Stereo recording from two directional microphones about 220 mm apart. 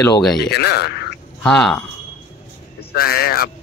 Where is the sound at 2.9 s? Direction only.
45° left (ahead or behind).